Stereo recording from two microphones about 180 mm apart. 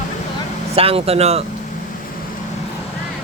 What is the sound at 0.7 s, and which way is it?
Speech, 35° right (ahead or behind).